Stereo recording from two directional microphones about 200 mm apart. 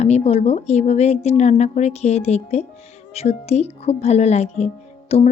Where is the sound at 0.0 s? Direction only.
30° left (ahead or behind).